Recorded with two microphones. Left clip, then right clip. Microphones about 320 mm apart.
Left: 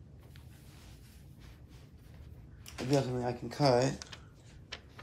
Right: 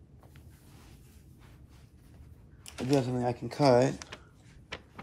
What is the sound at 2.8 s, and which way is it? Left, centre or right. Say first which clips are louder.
Typing: right 3 dB; right.